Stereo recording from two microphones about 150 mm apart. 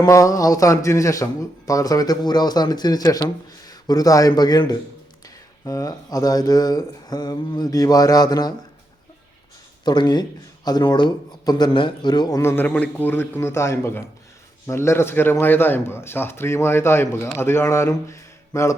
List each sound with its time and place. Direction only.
0.0 s speech: 20° left (ahead or behind)
9.8 s speech: 30° left (ahead or behind)
12.4 s a man's voice: 15° left (ahead or behind)